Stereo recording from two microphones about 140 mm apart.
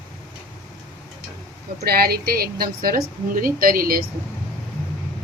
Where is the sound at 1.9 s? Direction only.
90° right.